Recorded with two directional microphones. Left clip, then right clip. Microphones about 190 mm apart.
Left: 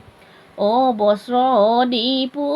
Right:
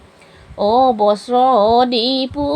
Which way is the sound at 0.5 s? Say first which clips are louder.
Right 4 dB; 25° right (ahead or behind).